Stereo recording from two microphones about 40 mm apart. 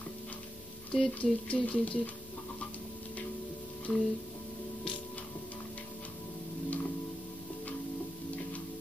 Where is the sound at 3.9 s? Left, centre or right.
Left.